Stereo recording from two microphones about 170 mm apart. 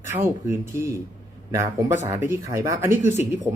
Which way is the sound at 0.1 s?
15° right (ahead or behind).